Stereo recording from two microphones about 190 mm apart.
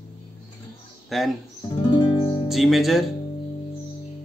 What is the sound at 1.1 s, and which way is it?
Speech, centre (ahead or behind).